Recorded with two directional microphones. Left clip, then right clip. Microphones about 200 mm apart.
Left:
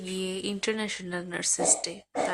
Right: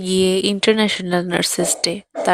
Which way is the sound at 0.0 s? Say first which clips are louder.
Right 16 dB; 45° right (ahead or behind).